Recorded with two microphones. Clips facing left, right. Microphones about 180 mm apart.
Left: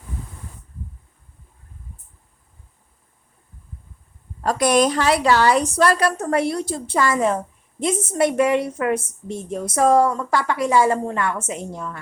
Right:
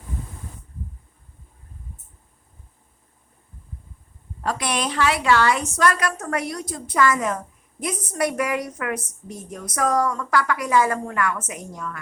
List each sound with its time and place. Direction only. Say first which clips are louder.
4.4 s a woman's voice: left 8 dB; 45° left (ahead or behind)